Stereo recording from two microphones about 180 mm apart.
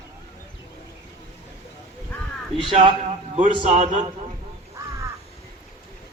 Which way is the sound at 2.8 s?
40° right (ahead or behind).